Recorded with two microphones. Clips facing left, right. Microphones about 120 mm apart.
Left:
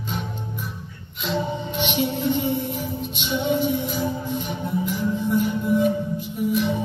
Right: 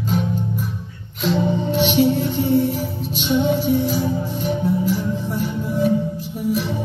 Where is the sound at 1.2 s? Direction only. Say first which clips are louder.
Right 6 dB; 40° right (ahead or behind).